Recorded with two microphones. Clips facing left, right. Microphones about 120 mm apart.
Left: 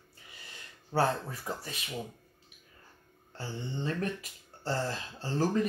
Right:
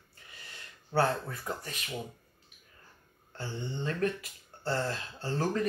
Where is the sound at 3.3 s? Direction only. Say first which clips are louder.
Even; 25° left (ahead or behind).